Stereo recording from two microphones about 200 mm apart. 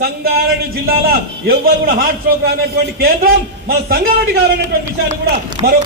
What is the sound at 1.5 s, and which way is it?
A man's voice, 45° right (ahead or behind).